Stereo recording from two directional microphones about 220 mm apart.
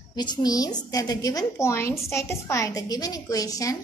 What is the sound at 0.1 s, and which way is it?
A woman's voice, 20° left (ahead or behind).